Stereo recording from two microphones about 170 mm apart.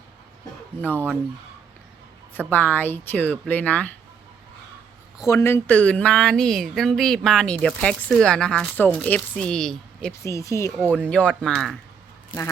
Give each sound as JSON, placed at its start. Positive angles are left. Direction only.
{"t": 0.8, "sound": "speech", "side_deg": 10}
{"t": 2.5, "sound": "speech", "side_deg": 10}
{"t": 5.1, "sound": "speech", "side_deg": 20}
{"t": 10.2, "sound": "speech", "side_deg": 20}